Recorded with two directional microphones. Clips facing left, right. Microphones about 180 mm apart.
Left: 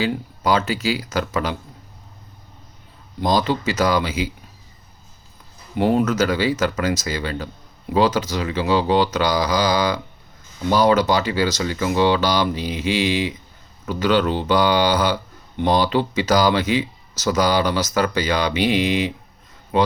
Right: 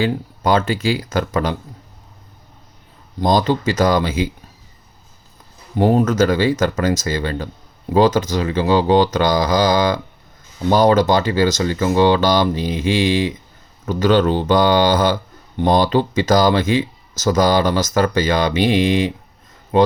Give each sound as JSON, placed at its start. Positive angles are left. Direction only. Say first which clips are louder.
{"t": 0.0, "sound": "speech", "louder": "right 3 dB", "side_deg": -50}
{"t": 3.2, "sound": "speech", "louder": "right 3 dB", "side_deg": -45}
{"t": 5.7, "sound": "speech", "louder": "right 3 dB", "side_deg": -40}